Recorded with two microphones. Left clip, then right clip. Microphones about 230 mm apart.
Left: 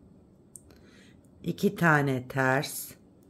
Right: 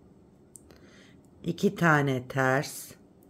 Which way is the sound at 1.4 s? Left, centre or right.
Centre.